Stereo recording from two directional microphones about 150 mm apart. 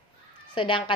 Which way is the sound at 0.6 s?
35° left (ahead or behind).